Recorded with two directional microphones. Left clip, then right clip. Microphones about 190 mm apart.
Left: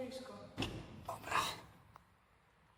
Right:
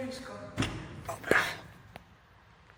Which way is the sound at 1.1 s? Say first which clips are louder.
Right 10 dB; 5° left (ahead or behind).